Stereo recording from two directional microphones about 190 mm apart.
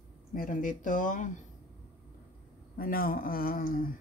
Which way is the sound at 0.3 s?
45° left (ahead or behind).